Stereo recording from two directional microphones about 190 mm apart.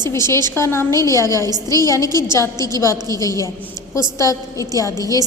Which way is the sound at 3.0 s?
15° left (ahead or behind).